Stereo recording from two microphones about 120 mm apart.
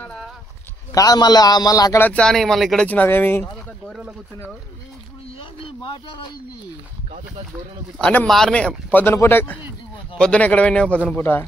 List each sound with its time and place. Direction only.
0.9 s a man's voice: 35° left (ahead or behind)
2.0 s speech: 10° left (ahead or behind)
5.4 s a sound: 40° left (ahead or behind)
8.0 s speech: 15° left (ahead or behind)